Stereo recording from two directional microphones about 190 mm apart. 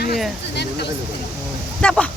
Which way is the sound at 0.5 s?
60° left (ahead or behind).